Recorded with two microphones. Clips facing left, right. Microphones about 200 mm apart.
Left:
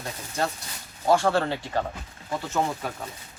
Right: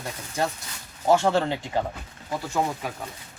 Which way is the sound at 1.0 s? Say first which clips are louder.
Right 1 dB; 20° right (ahead or behind).